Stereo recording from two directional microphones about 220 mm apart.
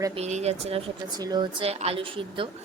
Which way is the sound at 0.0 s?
25° right (ahead or behind).